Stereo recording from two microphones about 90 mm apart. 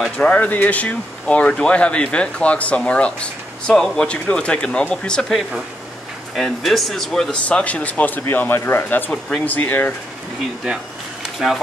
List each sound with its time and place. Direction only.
0.2 s speech: 15° left (ahead or behind)
11.3 s speech: centre (ahead or behind)